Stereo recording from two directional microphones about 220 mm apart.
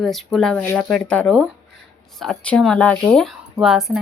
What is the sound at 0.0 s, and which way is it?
A woman's voice, centre (ahead or behind).